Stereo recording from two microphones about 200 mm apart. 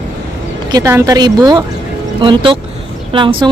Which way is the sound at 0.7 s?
15° right (ahead or behind).